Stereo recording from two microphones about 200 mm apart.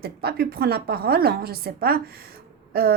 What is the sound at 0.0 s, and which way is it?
A woman's voice, 50° right (ahead or behind).